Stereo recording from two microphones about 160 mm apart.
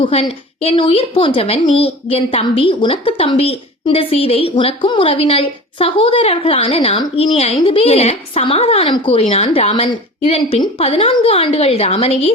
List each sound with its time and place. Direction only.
0.0 s a woman's voice: 40° left (ahead or behind)